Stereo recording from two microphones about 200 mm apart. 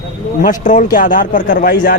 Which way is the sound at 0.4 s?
40° left (ahead or behind).